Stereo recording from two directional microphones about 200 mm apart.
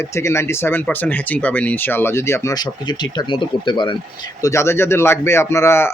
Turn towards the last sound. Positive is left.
turn(degrees=10)  # may be behind; listen again after turning